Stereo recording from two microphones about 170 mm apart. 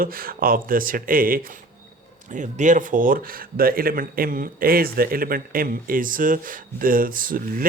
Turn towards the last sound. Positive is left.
turn(degrees=-55)  # may be behind; listen again after turning